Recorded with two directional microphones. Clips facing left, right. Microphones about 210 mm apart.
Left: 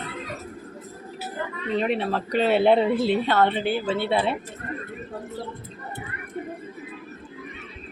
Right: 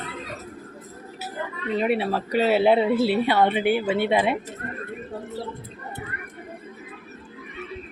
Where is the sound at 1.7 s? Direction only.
5° right (ahead or behind).